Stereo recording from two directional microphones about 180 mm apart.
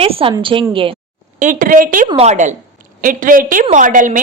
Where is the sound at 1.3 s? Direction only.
50° right (ahead or behind).